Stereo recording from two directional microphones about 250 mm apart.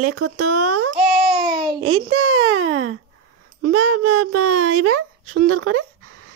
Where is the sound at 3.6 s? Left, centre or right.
Right.